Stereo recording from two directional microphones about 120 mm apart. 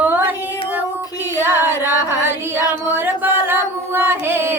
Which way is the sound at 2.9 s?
15° right (ahead or behind).